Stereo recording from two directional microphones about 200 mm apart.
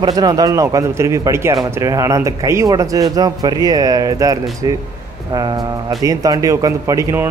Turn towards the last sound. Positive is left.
turn(degrees=-15)  # may be behind; listen again after turning